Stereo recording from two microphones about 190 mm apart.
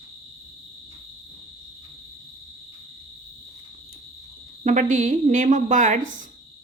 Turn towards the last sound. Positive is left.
turn(degrees=-40)  # may be behind; listen again after turning